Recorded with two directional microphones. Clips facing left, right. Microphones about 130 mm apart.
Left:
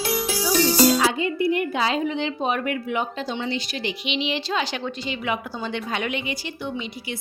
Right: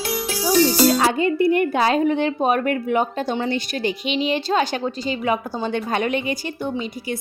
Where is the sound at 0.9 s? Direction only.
45° right (ahead or behind).